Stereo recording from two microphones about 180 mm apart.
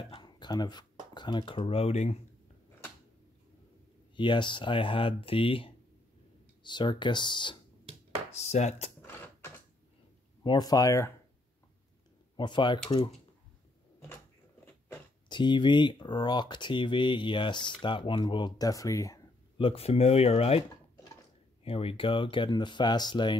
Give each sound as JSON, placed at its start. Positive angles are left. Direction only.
{"t": 0.1, "sound": "speech", "side_deg": 25}
{"t": 4.2, "sound": "speech", "side_deg": 25}
{"t": 8.3, "sound": "speech", "side_deg": 40}
{"t": 9.0, "sound": "mechanisms", "side_deg": 15}
{"t": 10.4, "sound": "speech", "side_deg": 25}
{"t": 12.4, "sound": "speech", "side_deg": 25}
{"t": 15.2, "sound": "speech", "side_deg": 25}
{"t": 19.6, "sound": "speech", "side_deg": 30}
{"t": 21.6, "sound": "speech", "side_deg": 30}